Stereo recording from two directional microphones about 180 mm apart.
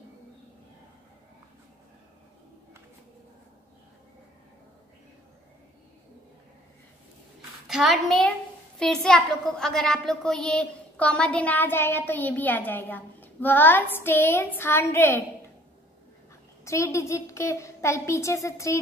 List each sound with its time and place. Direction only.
7.6 s a child's voice: centre (ahead or behind); by 15.2 s 15° left (ahead or behind)
16.6 s a woman's voice: 15° left (ahead or behind)